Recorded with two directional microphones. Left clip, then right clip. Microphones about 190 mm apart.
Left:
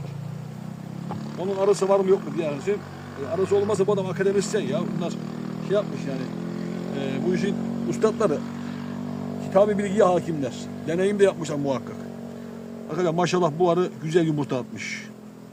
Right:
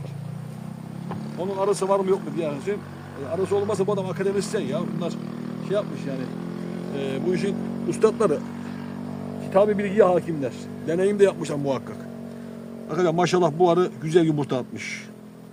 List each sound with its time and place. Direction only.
1.5 s speech: 20° right (ahead or behind)
9.5 s speech: 15° right (ahead or behind)
12.9 s a man's voice: 30° right (ahead or behind)